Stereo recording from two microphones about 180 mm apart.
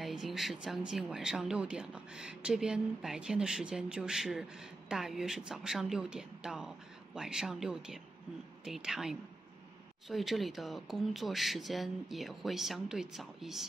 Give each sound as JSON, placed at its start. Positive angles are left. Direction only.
{"t": 0.0, "sound": "speech", "side_deg": 0}